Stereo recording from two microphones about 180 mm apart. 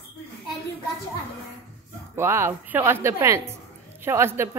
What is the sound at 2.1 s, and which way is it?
Speech, 15° right (ahead or behind).